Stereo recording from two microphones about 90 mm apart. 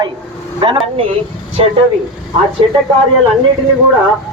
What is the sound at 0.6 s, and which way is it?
Speech, 70° right (ahead or behind).